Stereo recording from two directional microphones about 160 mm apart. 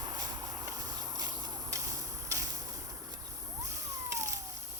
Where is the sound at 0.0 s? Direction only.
25° right (ahead or behind).